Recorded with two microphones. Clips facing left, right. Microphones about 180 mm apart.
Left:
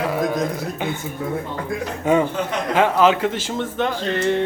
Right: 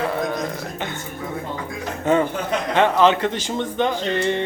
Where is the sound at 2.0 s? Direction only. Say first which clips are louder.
Left 1 dB; 10° left (ahead or behind).